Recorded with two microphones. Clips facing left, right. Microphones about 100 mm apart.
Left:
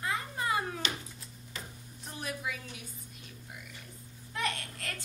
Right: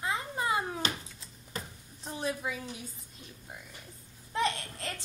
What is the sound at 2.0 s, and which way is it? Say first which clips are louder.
Speech: right 4 dB; 25° right (ahead or behind).